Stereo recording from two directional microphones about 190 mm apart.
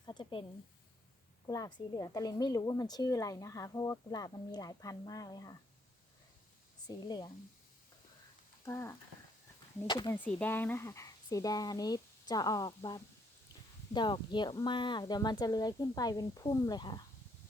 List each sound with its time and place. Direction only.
0.0 s a sound: 25° left (ahead or behind)
1.5 s a woman's voice: 20° left (ahead or behind)
6.8 s a woman's voice: 20° left (ahead or behind)
8.6 s speech: 15° left (ahead or behind)
9.8 s a woman's voice: 25° left (ahead or behind)
10.1 s a woman's voice: 10° left (ahead or behind)